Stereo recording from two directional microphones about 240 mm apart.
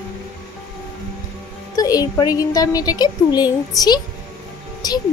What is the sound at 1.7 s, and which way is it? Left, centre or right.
Speech, centre.